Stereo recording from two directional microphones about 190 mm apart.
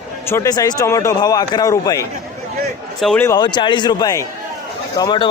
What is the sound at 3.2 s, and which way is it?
A man's voice, 20° left (ahead or behind).